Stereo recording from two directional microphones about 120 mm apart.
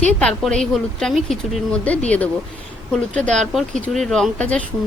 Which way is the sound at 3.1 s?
5° left (ahead or behind).